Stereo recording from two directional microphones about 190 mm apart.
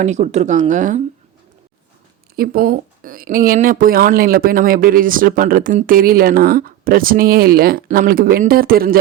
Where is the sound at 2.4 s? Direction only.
50° right (ahead or behind).